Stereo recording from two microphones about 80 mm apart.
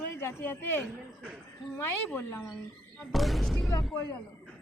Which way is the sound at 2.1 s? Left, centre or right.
Left.